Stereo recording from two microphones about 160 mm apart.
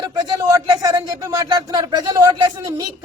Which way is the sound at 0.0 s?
20° right (ahead or behind).